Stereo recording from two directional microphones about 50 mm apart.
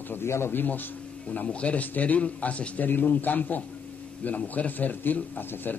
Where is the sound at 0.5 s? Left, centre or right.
Left.